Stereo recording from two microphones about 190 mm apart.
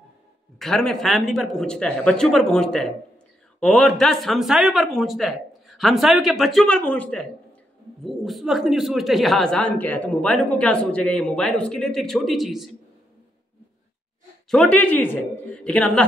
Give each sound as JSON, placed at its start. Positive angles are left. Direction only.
{"t": 0.6, "sound": "speech", "side_deg": 0}
{"t": 14.5, "sound": "speech", "side_deg": 5}